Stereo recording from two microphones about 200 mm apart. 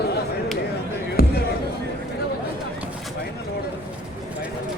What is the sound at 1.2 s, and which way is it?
Basketball bounce, 50° left (ahead or behind).